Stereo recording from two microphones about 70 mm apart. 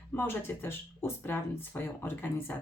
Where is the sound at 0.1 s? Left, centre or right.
Left.